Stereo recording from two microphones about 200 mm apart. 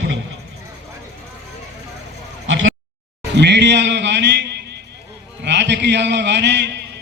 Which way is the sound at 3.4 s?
60° right (ahead or behind).